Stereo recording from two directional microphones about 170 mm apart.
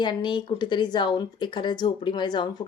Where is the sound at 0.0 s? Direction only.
25° left (ahead or behind).